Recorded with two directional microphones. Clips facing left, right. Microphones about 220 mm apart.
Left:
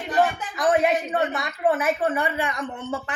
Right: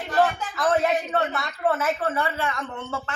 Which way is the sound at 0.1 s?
15° left (ahead or behind).